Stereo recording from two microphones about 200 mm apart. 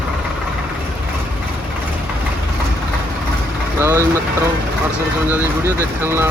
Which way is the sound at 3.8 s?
10° right (ahead or behind).